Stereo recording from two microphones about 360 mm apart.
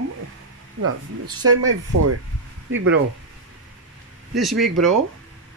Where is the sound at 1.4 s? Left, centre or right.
Right.